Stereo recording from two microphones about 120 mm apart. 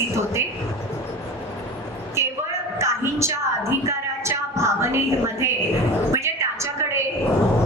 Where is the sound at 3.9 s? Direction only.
20° right (ahead or behind).